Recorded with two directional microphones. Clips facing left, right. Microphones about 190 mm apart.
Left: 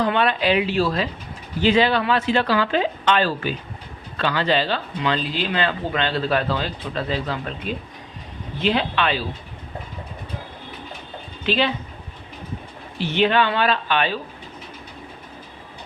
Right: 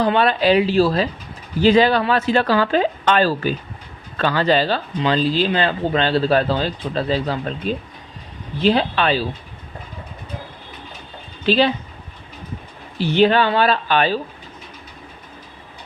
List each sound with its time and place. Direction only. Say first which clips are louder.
0.0 s speech: right 3 dB; 35° right (ahead or behind)
8.6 s speech: right 4 dB; 35° right (ahead or behind)
11.4 s speech: right 5 dB; 35° right (ahead or behind)
13.0 s speech: right 4 dB; 35° right (ahead or behind)